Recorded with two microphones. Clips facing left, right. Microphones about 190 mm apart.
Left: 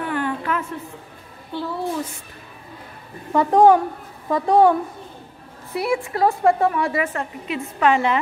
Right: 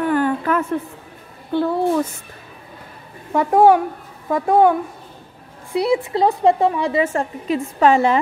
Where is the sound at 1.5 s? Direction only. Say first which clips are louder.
Right 8 dB; 55° right (ahead or behind).